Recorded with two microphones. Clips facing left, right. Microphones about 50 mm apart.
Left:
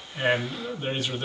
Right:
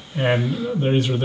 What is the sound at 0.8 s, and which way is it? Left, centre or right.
Speech, centre.